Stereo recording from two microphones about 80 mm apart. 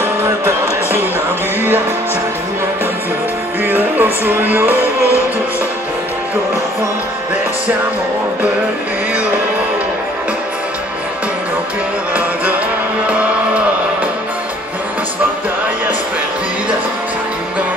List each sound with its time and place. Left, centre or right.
3.6 s music: right
12.1 s music: centre